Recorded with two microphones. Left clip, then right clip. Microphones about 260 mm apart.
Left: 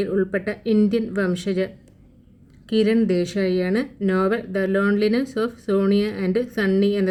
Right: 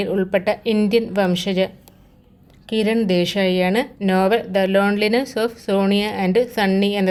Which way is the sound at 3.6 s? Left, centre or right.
Right.